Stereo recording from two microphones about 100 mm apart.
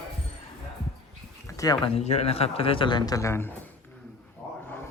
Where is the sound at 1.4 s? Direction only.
35° left (ahead or behind).